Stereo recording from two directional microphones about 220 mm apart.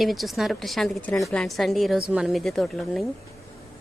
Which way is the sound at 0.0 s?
Centre (ahead or behind).